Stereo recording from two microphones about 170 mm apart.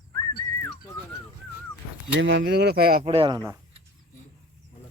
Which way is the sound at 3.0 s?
35° right (ahead or behind).